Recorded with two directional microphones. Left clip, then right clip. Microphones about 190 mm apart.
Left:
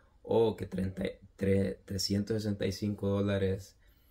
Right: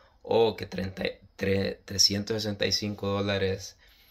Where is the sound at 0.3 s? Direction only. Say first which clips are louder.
Right 4 dB; 20° left (ahead or behind).